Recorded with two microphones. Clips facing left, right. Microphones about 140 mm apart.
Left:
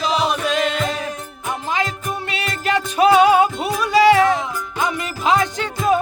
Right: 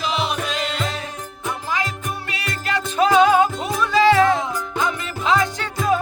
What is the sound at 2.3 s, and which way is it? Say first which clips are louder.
Music: left 5 dB; 20° left (ahead or behind).